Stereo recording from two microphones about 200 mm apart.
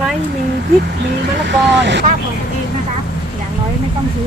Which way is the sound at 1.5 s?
60° right (ahead or behind).